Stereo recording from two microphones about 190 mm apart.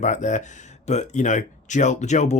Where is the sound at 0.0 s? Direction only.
40° left (ahead or behind).